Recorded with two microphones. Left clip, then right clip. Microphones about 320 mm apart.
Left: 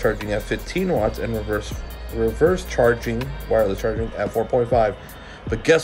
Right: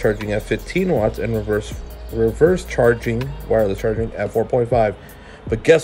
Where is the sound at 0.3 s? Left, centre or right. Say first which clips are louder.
Right 3 dB; right.